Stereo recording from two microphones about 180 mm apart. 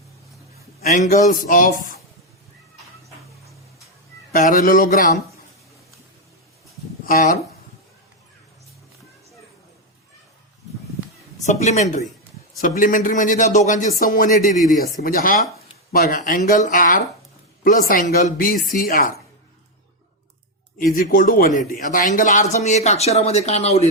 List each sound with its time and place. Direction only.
0.8 s speech: 55° left (ahead or behind)
4.3 s speech: 50° left (ahead or behind)
7.0 s speech: 50° left (ahead or behind)
11.4 s speech: 40° left (ahead or behind)
20.7 s speech: 50° left (ahead or behind)